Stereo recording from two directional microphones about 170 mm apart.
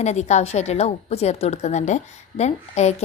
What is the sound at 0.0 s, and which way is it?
A woman's voice, 40° left (ahead or behind).